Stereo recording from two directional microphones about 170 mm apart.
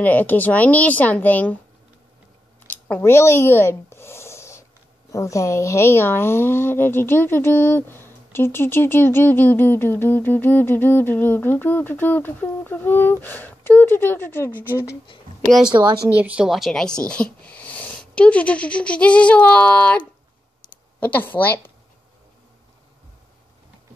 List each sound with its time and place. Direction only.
0.0 s speech: 10° left (ahead or behind)
2.6 s a sound: 10° left (ahead or behind)
5.1 s speech: 20° left (ahead or behind)
14.5 s speech: 10° right (ahead or behind)
16.1 s speech: 10° right (ahead or behind); by 20.0 s 10° left (ahead or behind)
21.0 s speech: 10° left (ahead or behind)